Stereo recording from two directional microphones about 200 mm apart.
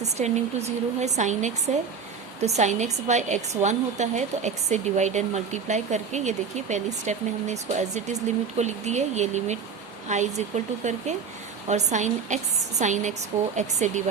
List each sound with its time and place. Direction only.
0.2 s a woman's voice: 35° right (ahead or behind)